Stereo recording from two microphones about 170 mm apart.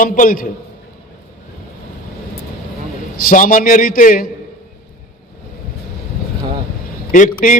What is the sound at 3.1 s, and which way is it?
A man's voice, 55° left (ahead or behind).